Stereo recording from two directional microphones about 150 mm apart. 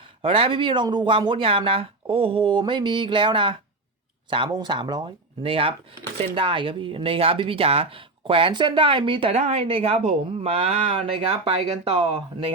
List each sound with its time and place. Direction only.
0.2 s speech: 40° right (ahead or behind)